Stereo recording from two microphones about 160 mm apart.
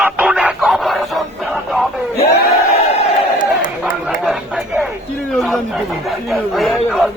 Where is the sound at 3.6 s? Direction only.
60° left (ahead or behind).